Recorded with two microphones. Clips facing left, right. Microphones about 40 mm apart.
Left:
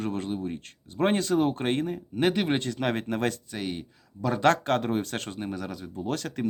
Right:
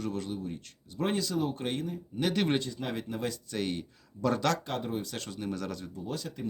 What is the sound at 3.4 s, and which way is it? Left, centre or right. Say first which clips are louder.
Speech: even; centre.